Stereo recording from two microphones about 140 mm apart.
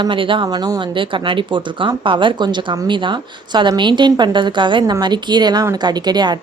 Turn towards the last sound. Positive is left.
turn(degrees=-30)  # may be behind; listen again after turning